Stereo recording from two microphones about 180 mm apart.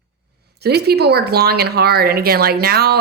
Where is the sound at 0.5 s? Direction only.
60° right (ahead or behind).